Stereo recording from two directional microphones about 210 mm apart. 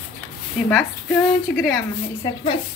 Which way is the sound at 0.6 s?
5° left (ahead or behind).